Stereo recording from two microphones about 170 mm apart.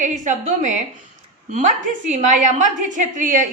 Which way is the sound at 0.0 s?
50° right (ahead or behind).